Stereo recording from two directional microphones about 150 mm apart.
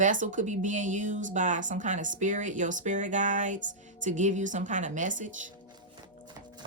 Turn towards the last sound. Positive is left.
turn(degrees=-60)  # may be behind; listen again after turning